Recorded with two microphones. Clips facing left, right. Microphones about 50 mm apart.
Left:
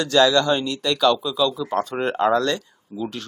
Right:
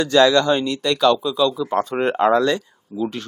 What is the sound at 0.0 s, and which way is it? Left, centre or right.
A man's voice, centre.